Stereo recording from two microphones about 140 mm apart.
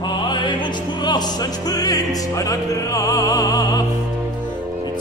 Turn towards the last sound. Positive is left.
turn(degrees=25)  # may be behind; listen again after turning